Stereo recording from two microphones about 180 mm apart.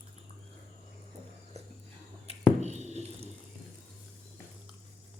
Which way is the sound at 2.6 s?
40° right (ahead or behind).